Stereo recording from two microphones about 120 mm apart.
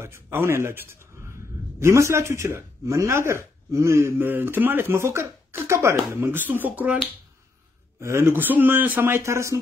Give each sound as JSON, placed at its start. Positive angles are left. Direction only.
{"t": 0.0, "sound": "a man's voice", "side_deg": -20}
{"t": 8.0, "sound": "a man's voice", "side_deg": -20}